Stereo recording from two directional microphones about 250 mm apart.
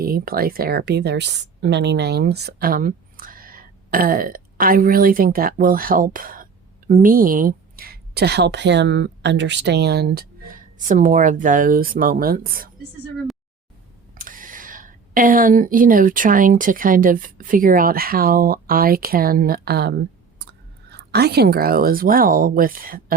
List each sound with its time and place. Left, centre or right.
0.0 s speech: right
14.2 s speech: right